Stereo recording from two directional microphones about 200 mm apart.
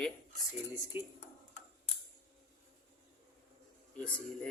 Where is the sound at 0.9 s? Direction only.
10° right (ahead or behind).